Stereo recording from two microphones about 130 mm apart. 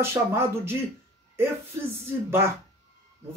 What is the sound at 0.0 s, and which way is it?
Speech, 20° right (ahead or behind).